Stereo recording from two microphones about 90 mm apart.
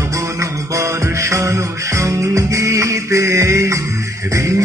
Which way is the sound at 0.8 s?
35° right (ahead or behind).